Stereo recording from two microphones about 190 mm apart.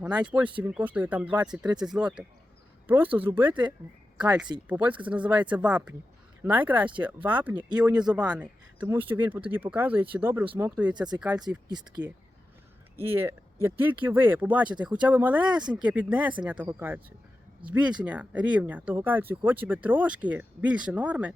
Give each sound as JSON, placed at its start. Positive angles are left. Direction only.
{"t": 0.0, "sound": "speech", "side_deg": -5}
{"t": 10.9, "sound": "speech", "side_deg": -20}
{"t": 11.2, "sound": "speech", "side_deg": -5}
{"t": 13.0, "sound": "speech", "side_deg": -10}